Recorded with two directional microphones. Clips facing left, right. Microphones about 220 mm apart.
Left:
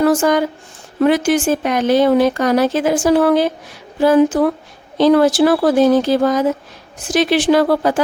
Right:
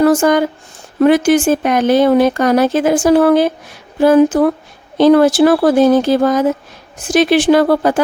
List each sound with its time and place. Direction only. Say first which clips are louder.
0.0 s speech: right 3 dB; 50° right (ahead or behind)